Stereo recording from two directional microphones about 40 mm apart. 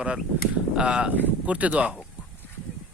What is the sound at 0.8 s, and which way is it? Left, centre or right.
Speech, right.